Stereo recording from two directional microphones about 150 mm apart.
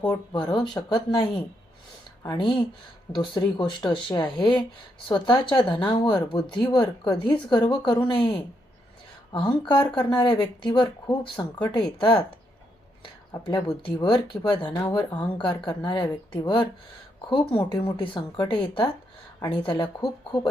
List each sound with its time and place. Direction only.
0.0 s speech: 25° left (ahead or behind)
2.4 s speech: 30° left (ahead or behind)
13.3 s speech: 25° left (ahead or behind)